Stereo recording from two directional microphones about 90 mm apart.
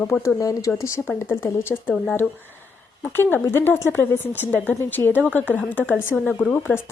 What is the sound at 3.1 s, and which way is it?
Speech, 25° left (ahead or behind).